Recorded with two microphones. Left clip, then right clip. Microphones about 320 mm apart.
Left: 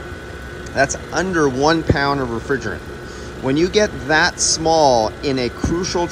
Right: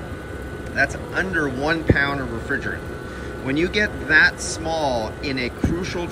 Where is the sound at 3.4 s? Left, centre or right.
Centre.